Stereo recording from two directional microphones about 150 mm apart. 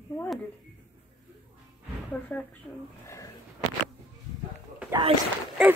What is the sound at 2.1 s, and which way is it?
Speech, 10° left (ahead or behind).